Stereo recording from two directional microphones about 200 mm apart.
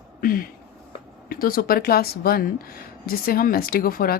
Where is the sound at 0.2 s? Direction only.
45° left (ahead or behind).